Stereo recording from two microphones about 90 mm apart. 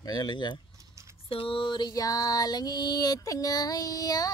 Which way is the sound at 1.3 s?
80° left.